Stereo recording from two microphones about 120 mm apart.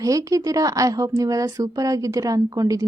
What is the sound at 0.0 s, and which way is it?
Speech, 30° right (ahead or behind).